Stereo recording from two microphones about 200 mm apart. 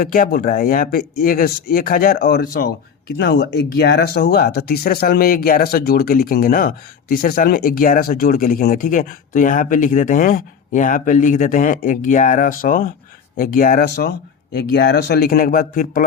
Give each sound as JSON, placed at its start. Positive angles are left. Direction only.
{"t": 0.0, "sound": "speech", "side_deg": 45}